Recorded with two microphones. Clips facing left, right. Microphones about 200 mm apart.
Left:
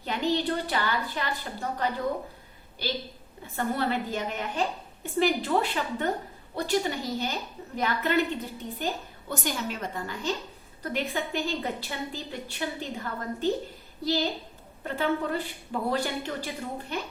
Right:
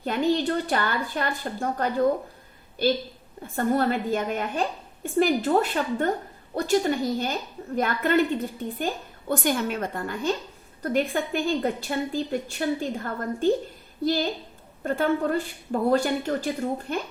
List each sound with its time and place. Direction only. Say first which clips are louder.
0.0 s a woman's voice: right 4 dB; 50° right (ahead or behind)
3.4 s a woman's voice: right 5 dB; 50° right (ahead or behind)